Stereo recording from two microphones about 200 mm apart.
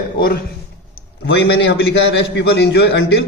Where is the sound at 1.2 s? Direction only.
60° left (ahead or behind).